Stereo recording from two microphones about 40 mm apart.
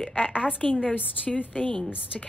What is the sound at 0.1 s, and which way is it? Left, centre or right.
Speech, left.